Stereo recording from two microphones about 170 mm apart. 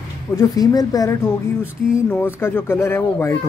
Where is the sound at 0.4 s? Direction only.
20° left (ahead or behind).